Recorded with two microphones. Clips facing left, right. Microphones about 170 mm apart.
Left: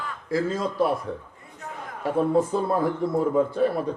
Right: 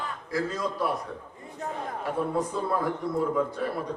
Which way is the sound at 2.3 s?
25° left (ahead or behind).